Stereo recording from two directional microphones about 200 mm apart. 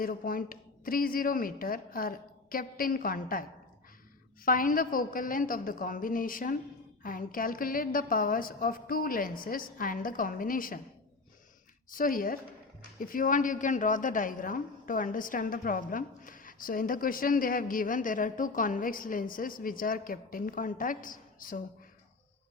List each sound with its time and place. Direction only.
0.0 s a woman's voice: 45° left (ahead or behind)
4.4 s a woman's voice: 45° left (ahead or behind)
11.9 s a woman's voice: 45° left (ahead or behind)